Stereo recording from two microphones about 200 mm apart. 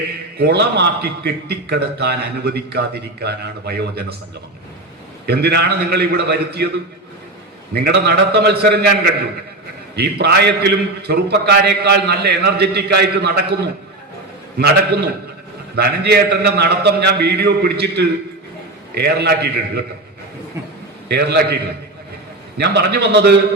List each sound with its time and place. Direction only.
0.3 s a man's voice: 55° right (ahead or behind)
5.2 s a man's voice: 55° right (ahead or behind)
7.7 s a man's voice: 55° right (ahead or behind)
15.7 s a man's voice: 50° right (ahead or behind)
21.1 s a man's voice: 55° right (ahead or behind)